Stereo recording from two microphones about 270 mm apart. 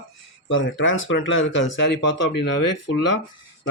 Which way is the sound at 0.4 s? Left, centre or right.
Left.